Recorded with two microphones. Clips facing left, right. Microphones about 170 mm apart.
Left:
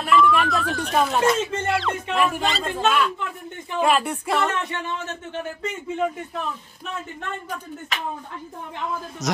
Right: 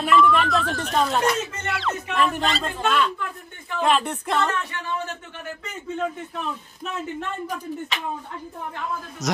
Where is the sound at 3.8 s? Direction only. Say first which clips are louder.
Even; 5° left (ahead or behind).